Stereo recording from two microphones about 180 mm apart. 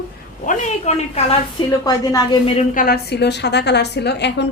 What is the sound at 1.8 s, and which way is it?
Speech, 20° left (ahead or behind).